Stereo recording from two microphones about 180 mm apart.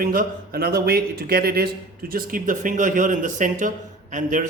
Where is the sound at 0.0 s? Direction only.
55° right (ahead or behind).